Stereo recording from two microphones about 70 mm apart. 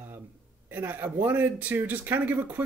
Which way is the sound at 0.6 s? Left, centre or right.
Right.